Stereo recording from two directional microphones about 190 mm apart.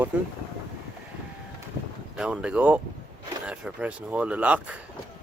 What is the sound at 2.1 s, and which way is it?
Speech, 5° right (ahead or behind).